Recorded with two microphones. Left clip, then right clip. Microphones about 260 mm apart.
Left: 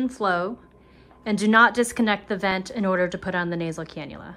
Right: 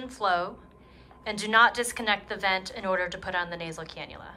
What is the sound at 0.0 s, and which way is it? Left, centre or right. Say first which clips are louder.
A woman's voice: left 3 dB; centre.